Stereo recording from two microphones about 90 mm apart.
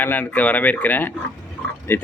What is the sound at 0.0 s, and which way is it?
Speech, 20° left (ahead or behind).